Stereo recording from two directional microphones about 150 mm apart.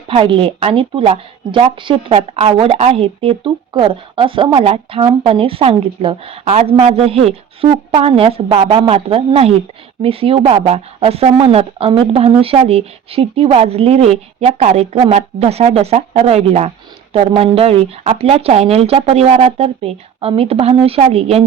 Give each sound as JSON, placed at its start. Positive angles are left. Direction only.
{"t": 0.1, "sound": "a woman's voice", "side_deg": -35}